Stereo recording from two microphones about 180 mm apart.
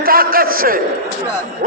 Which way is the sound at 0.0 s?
55° right (ahead or behind).